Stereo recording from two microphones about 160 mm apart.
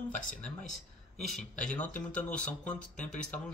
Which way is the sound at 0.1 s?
55° left (ahead or behind).